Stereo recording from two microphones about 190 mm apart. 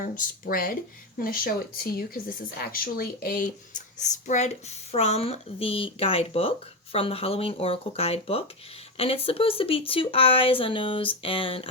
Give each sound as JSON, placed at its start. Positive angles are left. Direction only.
{"t": 0.0, "sound": "speech", "side_deg": 45}